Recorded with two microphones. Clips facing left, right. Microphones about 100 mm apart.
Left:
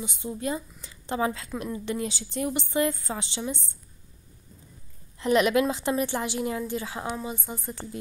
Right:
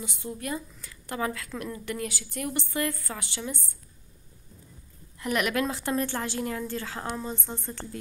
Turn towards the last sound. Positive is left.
turn(degrees=10)  # may be behind; listen again after turning